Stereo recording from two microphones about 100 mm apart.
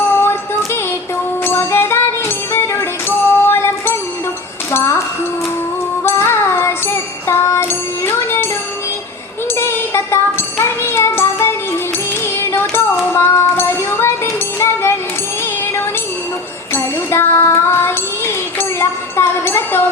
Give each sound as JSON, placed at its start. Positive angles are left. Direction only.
{"t": 0.1, "sound": "music", "side_deg": 25}
{"t": 4.7, "sound": "a sound", "side_deg": 25}
{"t": 6.1, "sound": "music", "side_deg": 25}
{"t": 9.6, "sound": "music", "side_deg": 25}
{"t": 13.1, "sound": "child singing", "side_deg": 25}
{"t": 14.6, "sound": "music", "side_deg": 25}
{"t": 16.7, "sound": "child singing", "side_deg": 25}
{"t": 19.5, "sound": "a sound", "side_deg": 25}